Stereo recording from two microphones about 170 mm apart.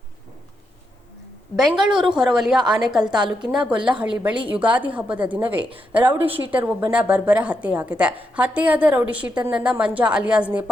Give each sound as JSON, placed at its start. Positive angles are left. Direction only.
{"t": 1.5, "sound": "a woman's voice", "side_deg": 0}